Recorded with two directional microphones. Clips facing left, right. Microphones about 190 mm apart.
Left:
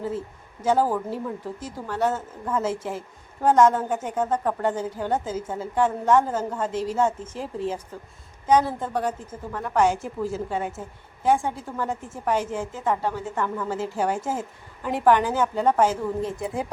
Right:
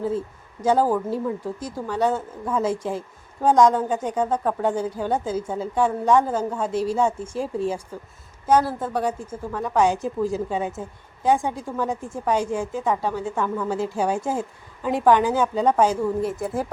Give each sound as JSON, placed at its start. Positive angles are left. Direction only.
{"t": 0.6, "sound": "a woman's voice", "side_deg": -15}